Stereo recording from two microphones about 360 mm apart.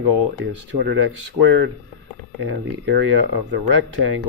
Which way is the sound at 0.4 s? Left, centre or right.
Right.